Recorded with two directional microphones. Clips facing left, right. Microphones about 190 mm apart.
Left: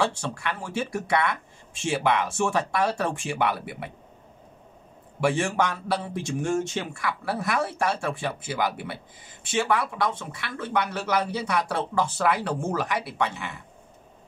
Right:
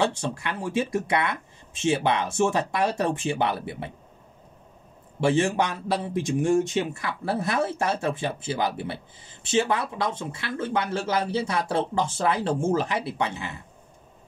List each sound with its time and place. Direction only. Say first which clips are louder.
0.0 s speech: right 1 dB; 20° right (ahead or behind)
5.2 s speech: right 2 dB; 25° right (ahead or behind)